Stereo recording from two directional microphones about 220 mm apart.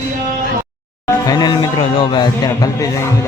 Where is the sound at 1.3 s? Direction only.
20° left (ahead or behind).